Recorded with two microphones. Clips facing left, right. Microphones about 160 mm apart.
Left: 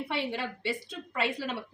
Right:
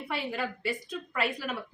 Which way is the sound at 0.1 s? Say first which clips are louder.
Right 3 dB; 25° left (ahead or behind).